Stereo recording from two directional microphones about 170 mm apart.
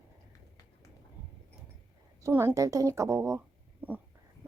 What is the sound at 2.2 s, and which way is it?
Speech, 15° right (ahead or behind).